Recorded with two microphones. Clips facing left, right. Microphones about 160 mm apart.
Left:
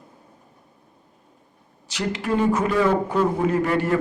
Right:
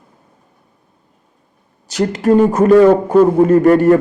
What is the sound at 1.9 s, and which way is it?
A man's voice, 45° right (ahead or behind).